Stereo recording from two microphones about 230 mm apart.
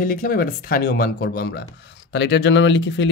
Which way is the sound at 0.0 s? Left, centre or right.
Left.